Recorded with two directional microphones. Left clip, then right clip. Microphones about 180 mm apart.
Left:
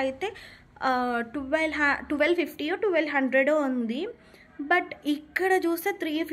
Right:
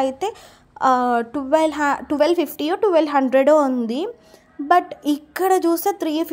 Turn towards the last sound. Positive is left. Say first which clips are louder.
# right 7 dB
turn(degrees=-30)  # may be behind; listen again after turning